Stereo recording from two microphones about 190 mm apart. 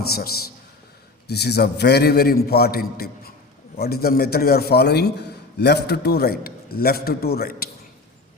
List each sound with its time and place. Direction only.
0.1 s a man's voice: 55° left (ahead or behind)